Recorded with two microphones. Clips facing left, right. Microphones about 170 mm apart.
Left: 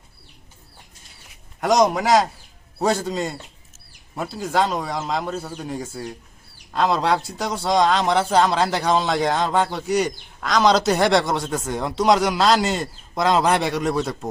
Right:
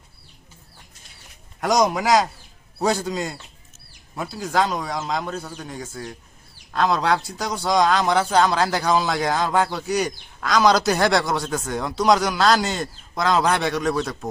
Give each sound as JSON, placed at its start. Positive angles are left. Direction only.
{"t": 1.6, "sound": "a man's voice", "side_deg": 0}